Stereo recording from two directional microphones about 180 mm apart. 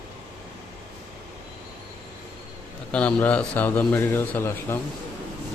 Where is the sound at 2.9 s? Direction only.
5° left (ahead or behind).